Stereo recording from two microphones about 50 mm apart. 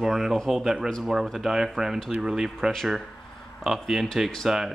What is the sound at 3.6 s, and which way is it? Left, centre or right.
Speech, centre.